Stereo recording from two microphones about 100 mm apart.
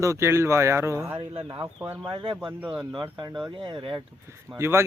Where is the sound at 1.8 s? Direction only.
15° right (ahead or behind).